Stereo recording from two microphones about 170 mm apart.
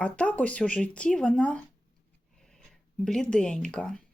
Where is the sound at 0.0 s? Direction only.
10° left (ahead or behind).